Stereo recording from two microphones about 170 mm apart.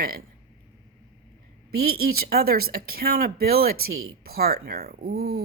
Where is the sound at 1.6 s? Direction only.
60° right (ahead or behind).